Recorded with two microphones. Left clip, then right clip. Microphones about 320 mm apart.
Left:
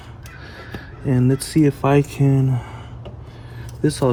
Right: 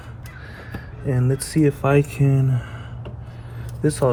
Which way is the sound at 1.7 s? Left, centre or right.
Centre.